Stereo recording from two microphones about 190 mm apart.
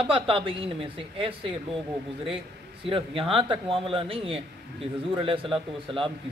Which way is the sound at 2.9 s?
30° right (ahead or behind).